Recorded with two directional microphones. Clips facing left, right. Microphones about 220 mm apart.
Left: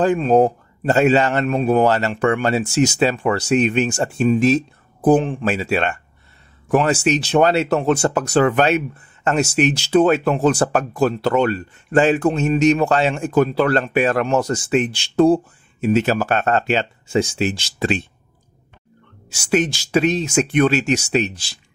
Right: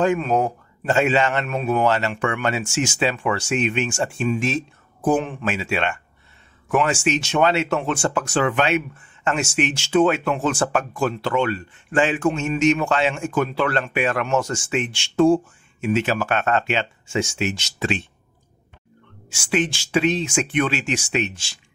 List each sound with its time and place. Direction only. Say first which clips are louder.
0.0 s speech: left 5 dB; 35° left (ahead or behind)
19.2 s speech: left 4 dB; 40° left (ahead or behind)